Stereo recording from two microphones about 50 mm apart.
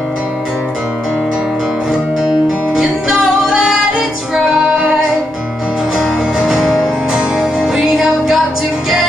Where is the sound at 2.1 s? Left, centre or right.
Centre.